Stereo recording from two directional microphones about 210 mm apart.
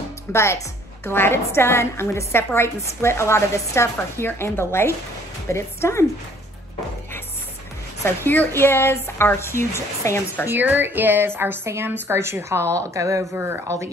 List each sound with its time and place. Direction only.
0.3 s a woman's voice: 10° left (ahead or behind)
8.0 s a woman's voice: 10° left (ahead or behind)
10.4 s a woman's voice: 10° right (ahead or behind)